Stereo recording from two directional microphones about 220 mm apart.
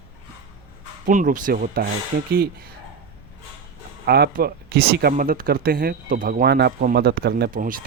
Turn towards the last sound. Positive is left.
turn(degrees=-40)  # may be behind; listen again after turning